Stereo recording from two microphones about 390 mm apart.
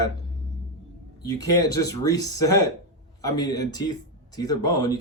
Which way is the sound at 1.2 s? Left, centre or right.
Left.